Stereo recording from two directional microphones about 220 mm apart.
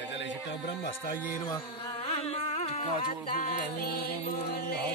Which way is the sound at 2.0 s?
25° left (ahead or behind).